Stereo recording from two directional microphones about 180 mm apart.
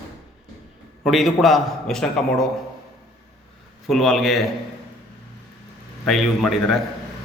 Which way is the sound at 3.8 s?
Centre (ahead or behind).